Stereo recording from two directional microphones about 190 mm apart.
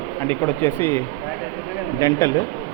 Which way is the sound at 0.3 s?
10° left (ahead or behind).